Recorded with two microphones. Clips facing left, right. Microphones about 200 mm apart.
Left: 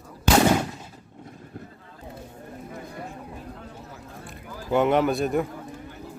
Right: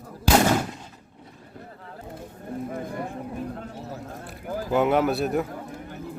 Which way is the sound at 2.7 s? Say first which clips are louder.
Right 4 dB; 55° right (ahead or behind).